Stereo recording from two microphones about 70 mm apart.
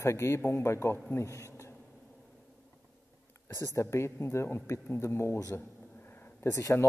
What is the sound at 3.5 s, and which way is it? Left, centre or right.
Speech, left.